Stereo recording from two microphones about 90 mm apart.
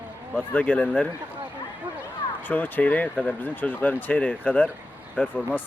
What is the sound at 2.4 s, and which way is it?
Speech, 20° left (ahead or behind).